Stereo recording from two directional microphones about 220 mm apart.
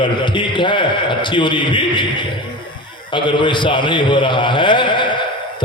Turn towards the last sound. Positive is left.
turn(degrees=20)  # may be behind; listen again after turning